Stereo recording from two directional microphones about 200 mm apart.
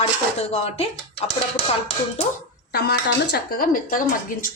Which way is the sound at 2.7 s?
55° left (ahead or behind).